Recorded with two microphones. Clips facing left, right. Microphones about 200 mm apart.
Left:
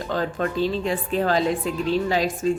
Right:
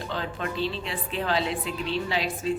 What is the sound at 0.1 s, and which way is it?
A woman's voice, 45° left (ahead or behind).